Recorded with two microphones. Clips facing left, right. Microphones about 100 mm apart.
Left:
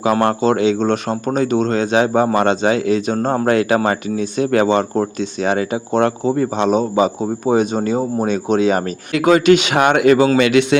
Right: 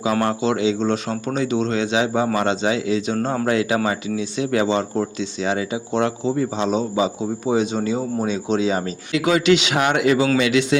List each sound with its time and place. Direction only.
0.0 s a man's voice: 55° left (ahead or behind)